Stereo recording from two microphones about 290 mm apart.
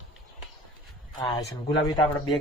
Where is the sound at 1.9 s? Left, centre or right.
Centre.